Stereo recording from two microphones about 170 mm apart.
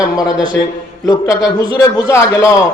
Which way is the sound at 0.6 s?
90° left.